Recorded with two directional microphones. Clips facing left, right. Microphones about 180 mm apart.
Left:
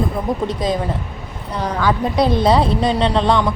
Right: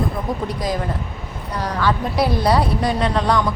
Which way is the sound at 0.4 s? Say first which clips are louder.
Left 4 dB; 25° left (ahead or behind).